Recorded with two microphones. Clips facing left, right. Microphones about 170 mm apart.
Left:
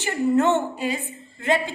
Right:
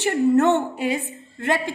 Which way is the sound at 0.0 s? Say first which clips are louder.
Right 3 dB; 65° right (ahead or behind).